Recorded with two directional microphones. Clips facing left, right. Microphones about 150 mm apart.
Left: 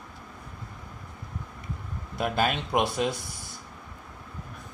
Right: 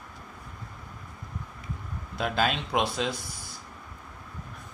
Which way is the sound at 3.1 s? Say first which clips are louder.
Left 1 dB; 55° left (ahead or behind).